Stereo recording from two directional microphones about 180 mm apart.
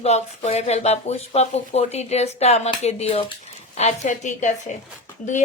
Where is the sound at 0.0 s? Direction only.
35° left (ahead or behind).